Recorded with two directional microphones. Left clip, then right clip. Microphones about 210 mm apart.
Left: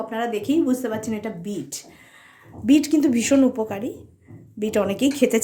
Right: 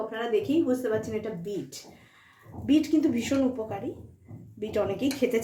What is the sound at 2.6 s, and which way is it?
Speech, 50° left (ahead or behind).